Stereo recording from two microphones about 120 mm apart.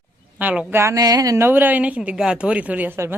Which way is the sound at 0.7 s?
20° right (ahead or behind).